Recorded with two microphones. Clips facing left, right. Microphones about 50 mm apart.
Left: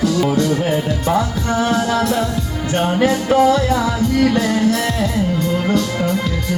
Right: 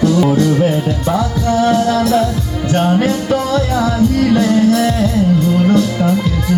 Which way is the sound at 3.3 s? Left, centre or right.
Centre.